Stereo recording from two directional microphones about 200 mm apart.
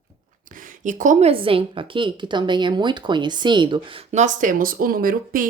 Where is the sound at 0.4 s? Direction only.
40° right (ahead or behind).